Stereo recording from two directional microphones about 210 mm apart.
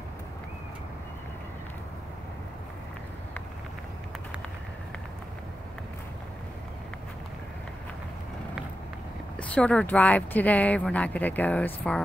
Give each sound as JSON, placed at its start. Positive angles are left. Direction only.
{"t": 9.4, "sound": "speech", "side_deg": 5}